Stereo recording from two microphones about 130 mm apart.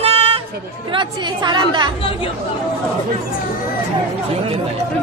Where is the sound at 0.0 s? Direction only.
50° right (ahead or behind).